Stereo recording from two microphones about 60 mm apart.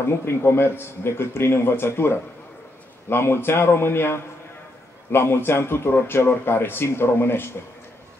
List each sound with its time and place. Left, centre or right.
0.0 s a man's voice: left